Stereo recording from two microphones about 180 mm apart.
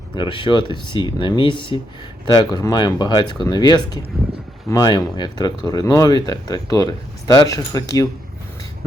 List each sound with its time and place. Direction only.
0.2 s speech: 25° left (ahead or behind)